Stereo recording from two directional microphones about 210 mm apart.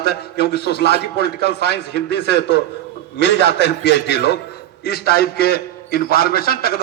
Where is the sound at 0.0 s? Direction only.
50° left (ahead or behind).